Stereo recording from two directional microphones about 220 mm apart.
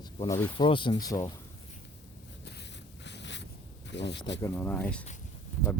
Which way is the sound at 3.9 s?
55° left (ahead or behind).